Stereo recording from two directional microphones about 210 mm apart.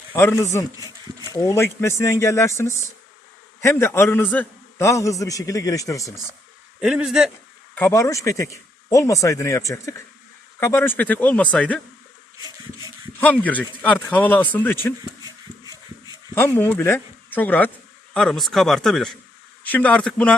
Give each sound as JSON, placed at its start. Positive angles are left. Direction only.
{"t": 0.1, "sound": "a man's voice", "side_deg": 10}
{"t": 0.8, "sound": "a sound", "side_deg": -15}
{"t": 1.3, "sound": "a man's voice", "side_deg": 15}
{"t": 6.7, "sound": "speech", "side_deg": -5}
{"t": 7.8, "sound": "a man's voice", "side_deg": 10}
{"t": 12.4, "sound": "a sound", "side_deg": -20}
{"t": 13.1, "sound": "a man's voice", "side_deg": 5}
{"t": 15.0, "sound": "a sound", "side_deg": -20}
{"t": 16.3, "sound": "speech", "side_deg": 10}